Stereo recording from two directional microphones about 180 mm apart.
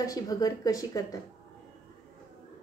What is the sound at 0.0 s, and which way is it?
Speech, 20° left (ahead or behind).